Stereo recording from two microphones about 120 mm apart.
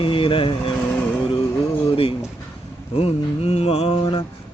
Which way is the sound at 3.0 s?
55° left (ahead or behind).